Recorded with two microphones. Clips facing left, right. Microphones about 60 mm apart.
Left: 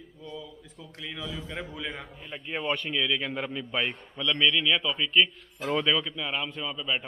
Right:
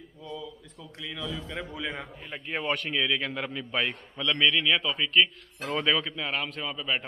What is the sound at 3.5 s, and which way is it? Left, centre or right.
A man's voice, centre.